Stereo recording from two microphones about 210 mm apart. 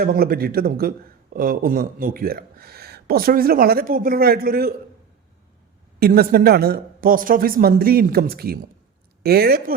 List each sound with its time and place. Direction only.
0.0 s a man's voice: 45° right (ahead or behind)
6.0 s a man's voice: 45° right (ahead or behind)